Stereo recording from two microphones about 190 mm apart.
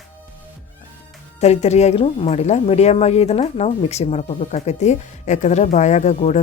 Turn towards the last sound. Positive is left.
turn(degrees=35)  # may be behind; listen again after turning